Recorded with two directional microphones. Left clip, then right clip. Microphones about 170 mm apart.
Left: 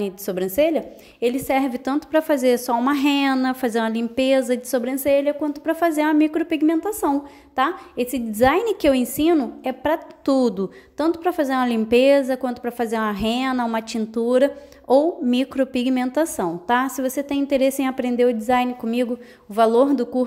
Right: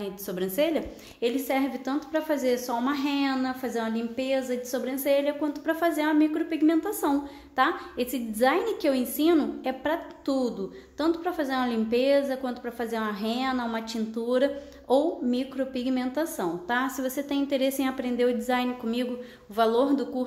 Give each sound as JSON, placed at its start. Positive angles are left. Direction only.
{"t": 0.0, "sound": "a woman's voice", "side_deg": 40}
{"t": 9.3, "sound": "a woman's voice", "side_deg": 30}